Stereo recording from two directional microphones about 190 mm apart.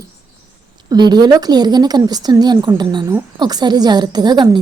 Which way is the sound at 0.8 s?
20° right (ahead or behind).